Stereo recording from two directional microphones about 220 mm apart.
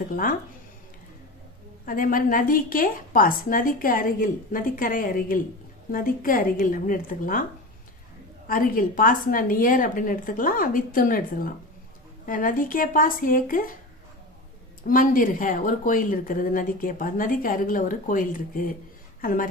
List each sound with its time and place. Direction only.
1.8 s speech: 40° left (ahead or behind)
8.4 s speech: 40° left (ahead or behind)
14.8 s speech: 40° left (ahead or behind)